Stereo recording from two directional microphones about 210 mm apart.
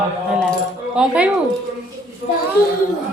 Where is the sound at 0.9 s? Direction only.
5° right (ahead or behind).